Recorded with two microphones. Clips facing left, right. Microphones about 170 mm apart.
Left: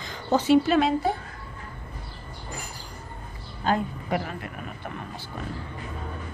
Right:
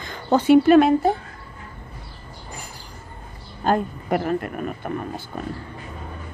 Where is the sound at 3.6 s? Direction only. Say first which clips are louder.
Right 4 dB; 50° right (ahead or behind).